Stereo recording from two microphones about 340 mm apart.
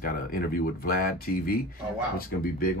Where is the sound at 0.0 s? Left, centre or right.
Left.